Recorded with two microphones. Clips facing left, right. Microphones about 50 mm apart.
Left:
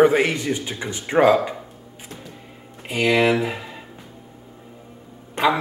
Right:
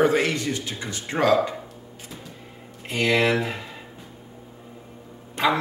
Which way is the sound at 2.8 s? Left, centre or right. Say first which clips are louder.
Left 3 dB; centre.